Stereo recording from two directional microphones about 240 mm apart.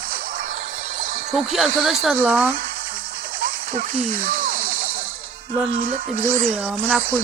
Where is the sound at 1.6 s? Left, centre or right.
Centre.